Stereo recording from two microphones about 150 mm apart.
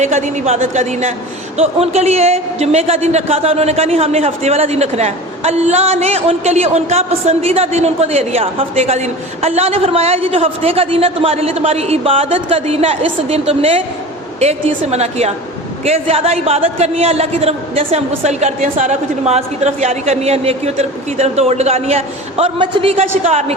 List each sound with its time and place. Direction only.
0.0 s a man's voice: 50° right (ahead or behind)